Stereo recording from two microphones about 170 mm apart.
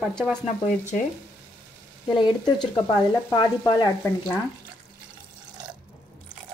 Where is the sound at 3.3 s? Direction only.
25° left (ahead or behind).